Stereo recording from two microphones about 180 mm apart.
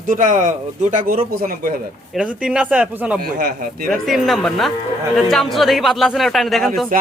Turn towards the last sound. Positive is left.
turn(degrees=0)  # may be behind; listen again after turning